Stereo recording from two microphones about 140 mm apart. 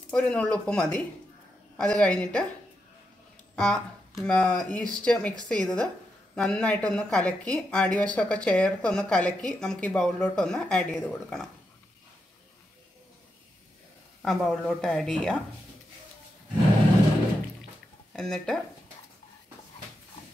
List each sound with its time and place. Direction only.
0.1 s speech: 10° left (ahead or behind)
3.5 s speech: 5° left (ahead or behind)
14.2 s speech: centre (ahead or behind)
18.1 s speech: 5° left (ahead or behind)